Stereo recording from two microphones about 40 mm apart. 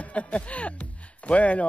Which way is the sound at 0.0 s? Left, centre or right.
Left.